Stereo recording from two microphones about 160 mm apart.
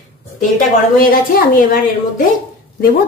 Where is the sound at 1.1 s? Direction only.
65° left (ahead or behind).